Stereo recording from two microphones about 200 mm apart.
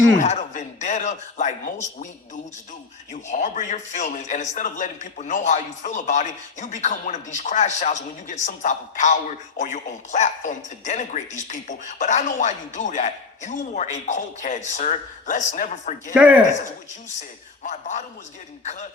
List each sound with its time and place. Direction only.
0.2 s a man's voice: 40° left (ahead or behind)
16.1 s speech: 5° right (ahead or behind)
17.6 s speech: 35° left (ahead or behind)